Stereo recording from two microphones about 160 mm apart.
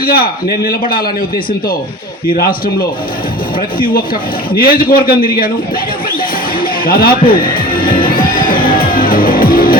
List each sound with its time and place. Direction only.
0.0 s a man's voice: 65° left (ahead or behind)
4.5 s a man's voice: 65° left (ahead or behind)
6.6 s a man's voice: 65° left (ahead or behind)
7.9 s music: 30° left (ahead or behind)
8.2 s music: 65° left (ahead or behind)